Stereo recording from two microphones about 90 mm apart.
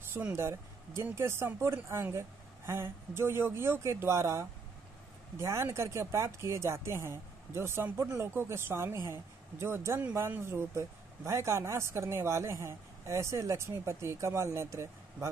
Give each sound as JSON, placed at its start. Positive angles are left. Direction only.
{"t": 0.1, "sound": "a woman's voice", "side_deg": -25}